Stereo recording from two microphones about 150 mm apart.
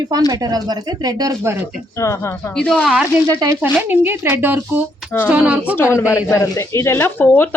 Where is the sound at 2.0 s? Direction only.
20° left (ahead or behind).